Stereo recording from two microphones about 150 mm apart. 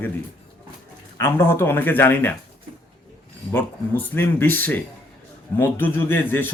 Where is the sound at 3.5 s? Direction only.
15° left (ahead or behind).